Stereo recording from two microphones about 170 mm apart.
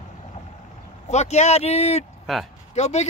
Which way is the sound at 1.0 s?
40° left (ahead or behind).